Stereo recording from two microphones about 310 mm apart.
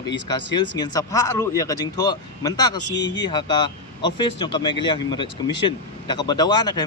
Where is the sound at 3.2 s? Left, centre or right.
Centre.